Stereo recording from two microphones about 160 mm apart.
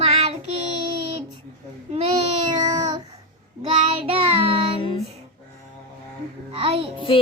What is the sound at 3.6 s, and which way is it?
Child singing, 35° right (ahead or behind).